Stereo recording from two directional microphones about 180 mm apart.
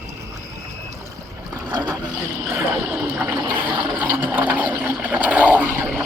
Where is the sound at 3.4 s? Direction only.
10° right (ahead or behind).